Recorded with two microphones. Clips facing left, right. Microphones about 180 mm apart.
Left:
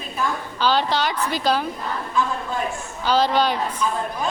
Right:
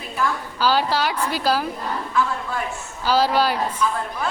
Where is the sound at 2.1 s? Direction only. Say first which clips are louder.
Even; 20° left (ahead or behind).